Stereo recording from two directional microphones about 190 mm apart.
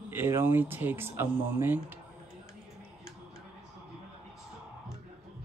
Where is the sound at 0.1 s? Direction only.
10° right (ahead or behind).